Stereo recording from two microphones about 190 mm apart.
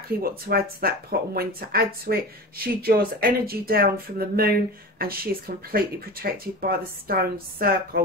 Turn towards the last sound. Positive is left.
turn(degrees=-50)  # may be behind; listen again after turning